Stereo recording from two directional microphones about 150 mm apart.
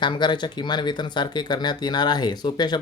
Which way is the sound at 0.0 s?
30° left (ahead or behind).